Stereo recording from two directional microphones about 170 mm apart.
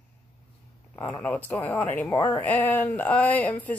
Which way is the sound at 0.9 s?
10° left (ahead or behind).